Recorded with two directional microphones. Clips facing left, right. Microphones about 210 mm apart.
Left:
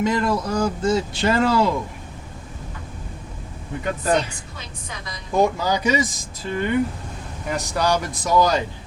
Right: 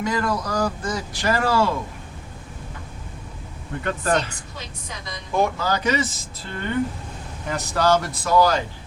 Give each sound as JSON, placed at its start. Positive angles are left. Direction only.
{"t": 0.0, "sound": "speech", "side_deg": 25}
{"t": 3.8, "sound": "speech", "side_deg": 10}
{"t": 5.4, "sound": "speech", "side_deg": 15}